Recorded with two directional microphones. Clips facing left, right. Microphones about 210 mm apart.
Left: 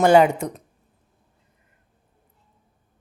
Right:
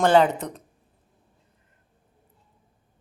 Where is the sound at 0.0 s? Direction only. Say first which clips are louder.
Left 3 dB; 10° left (ahead or behind).